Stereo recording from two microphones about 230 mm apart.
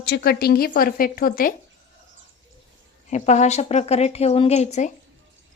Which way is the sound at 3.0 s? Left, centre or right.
Left.